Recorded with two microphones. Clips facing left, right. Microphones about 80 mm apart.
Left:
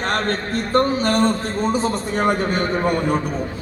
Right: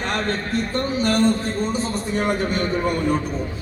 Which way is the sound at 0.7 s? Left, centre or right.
Left.